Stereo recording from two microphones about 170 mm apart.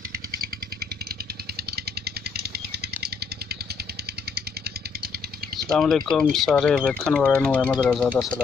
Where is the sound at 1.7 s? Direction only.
70° right (ahead or behind).